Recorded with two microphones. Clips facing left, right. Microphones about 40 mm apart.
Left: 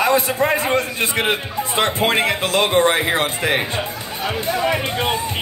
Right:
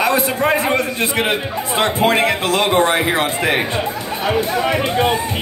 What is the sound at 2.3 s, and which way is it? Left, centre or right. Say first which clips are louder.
Speech: right 2 dB; right.